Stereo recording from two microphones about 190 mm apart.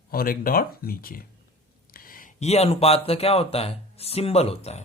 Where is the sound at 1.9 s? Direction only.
50° left (ahead or behind); by 3.0 s 30° left (ahead or behind).